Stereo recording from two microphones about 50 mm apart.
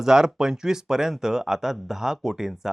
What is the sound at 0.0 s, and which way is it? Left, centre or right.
Speech, centre.